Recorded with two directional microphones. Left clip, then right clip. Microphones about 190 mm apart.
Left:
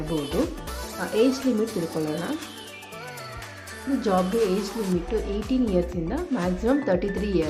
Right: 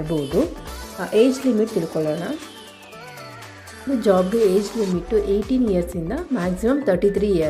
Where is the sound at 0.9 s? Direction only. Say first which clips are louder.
Right 5 dB; 20° right (ahead or behind).